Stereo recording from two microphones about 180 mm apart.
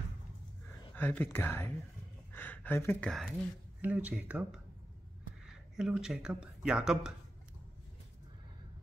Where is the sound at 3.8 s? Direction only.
10° right (ahead or behind).